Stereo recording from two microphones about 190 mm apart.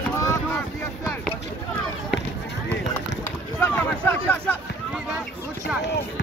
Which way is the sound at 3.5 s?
10° left (ahead or behind).